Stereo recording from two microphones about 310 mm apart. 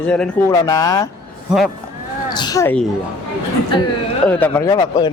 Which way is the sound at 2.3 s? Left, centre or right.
Centre.